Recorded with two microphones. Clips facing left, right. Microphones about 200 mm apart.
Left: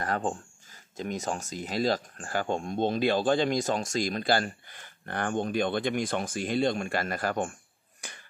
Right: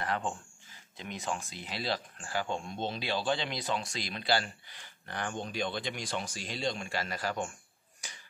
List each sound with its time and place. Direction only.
0.0 s speech: 40° left (ahead or behind)
8.0 s finger snapping: 55° left (ahead or behind)